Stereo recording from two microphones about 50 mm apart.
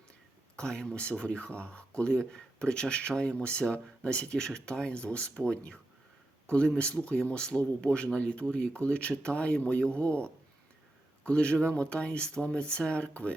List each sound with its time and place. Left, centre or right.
0.5 s speech: centre